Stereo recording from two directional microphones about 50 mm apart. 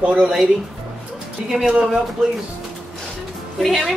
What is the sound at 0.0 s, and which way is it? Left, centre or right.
Speech, right.